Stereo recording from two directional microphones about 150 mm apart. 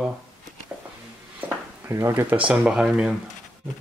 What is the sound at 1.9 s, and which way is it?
Speech, 15° right (ahead or behind).